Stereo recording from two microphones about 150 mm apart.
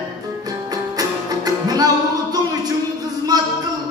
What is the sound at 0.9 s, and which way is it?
Music, 25° right (ahead or behind).